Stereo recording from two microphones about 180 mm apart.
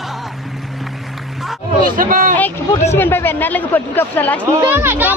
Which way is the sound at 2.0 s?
50° right (ahead or behind).